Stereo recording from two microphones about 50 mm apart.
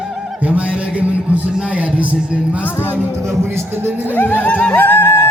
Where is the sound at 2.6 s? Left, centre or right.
Left.